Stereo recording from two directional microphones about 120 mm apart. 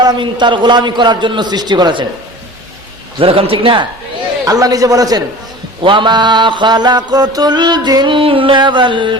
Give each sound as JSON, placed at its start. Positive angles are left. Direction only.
{"t": 0.0, "sound": "mantra", "side_deg": -35}
{"t": 3.2, "sound": "a man's voice", "side_deg": -50}
{"t": 4.4, "sound": "mantra", "side_deg": -30}
{"t": 5.8, "sound": "mantra", "side_deg": -45}